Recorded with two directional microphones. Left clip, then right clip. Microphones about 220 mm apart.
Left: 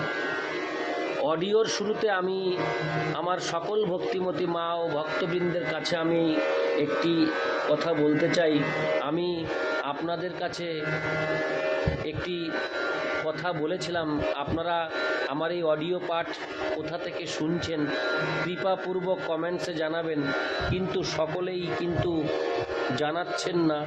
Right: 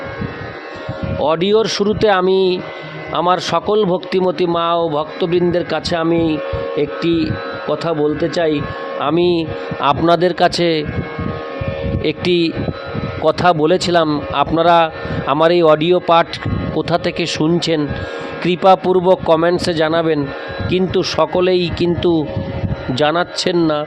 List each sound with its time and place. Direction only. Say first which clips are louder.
1.2 s speech: right 12 dB; 45° right (ahead or behind)
12.0 s speech: right 16 dB; 50° right (ahead or behind)